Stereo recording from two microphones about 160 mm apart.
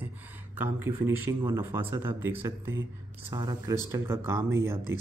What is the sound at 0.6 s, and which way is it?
Speech, 15° right (ahead or behind).